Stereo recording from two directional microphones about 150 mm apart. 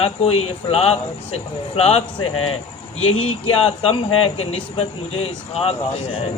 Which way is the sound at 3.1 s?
40° left (ahead or behind).